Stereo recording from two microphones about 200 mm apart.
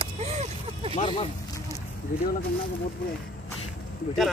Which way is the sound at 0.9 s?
25° left (ahead or behind).